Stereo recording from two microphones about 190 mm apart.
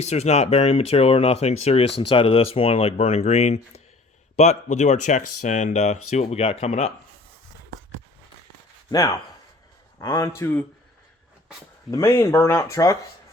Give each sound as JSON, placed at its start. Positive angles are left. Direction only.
{"t": 0.1, "sound": "speech", "side_deg": 35}
{"t": 8.9, "sound": "speech", "side_deg": 20}
{"t": 11.9, "sound": "speech", "side_deg": 15}